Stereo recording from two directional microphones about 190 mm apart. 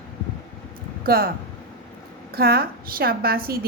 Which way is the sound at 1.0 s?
50° right (ahead or behind).